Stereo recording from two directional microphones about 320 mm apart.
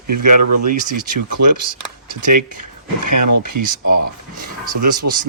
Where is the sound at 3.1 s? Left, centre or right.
Right.